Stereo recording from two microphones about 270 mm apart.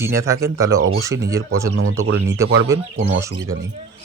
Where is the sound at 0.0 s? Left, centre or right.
Centre.